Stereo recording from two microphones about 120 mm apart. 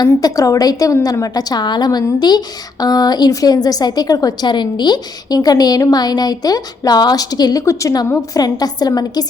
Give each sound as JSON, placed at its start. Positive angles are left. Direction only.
{"t": 0.0, "sound": "a woman's voice", "side_deg": 30}